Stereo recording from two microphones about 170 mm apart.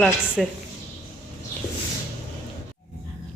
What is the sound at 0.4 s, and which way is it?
Speech, centre (ahead or behind).